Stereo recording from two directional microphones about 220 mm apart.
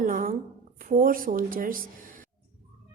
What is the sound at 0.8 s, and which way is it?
Speech, 40° right (ahead or behind).